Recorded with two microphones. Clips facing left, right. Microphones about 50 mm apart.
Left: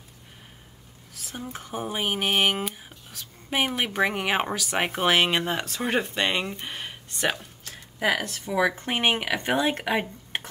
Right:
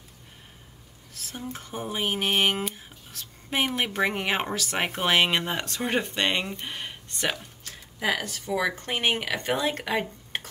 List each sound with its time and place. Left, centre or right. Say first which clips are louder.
1.1 s speech: even; centre
7.6 s a sound: left 3 dB; centre
8.4 s speech: left 3 dB; centre